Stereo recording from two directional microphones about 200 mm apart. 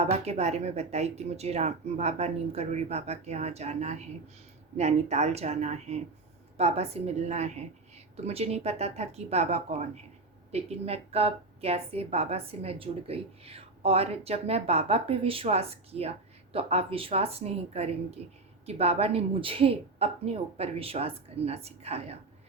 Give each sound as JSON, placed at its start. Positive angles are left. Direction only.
{"t": 0.0, "sound": "a woman's voice", "side_deg": -30}